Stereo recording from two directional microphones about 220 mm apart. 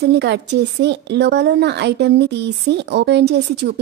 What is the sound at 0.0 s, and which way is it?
A woman's voice, 50° right (ahead or behind).